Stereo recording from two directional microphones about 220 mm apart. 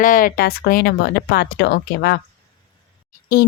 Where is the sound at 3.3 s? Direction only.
45° left (ahead or behind).